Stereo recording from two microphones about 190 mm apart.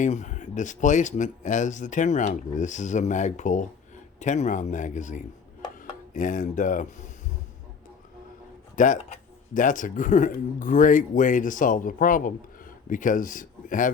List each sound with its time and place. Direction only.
0.0 s speech: 40° left (ahead or behind)
8.7 s speech: 40° left (ahead or behind)